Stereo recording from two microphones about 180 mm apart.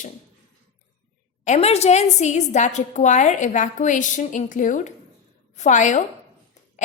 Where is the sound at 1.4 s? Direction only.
40° left (ahead or behind).